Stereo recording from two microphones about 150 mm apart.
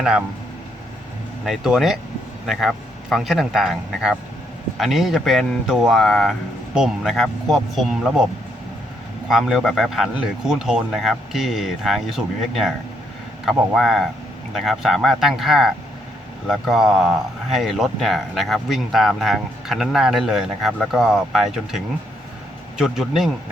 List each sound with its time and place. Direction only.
1.5 s speech: centre (ahead or behind)
9.3 s speech: centre (ahead or behind)
22.8 s speech: 5° right (ahead or behind)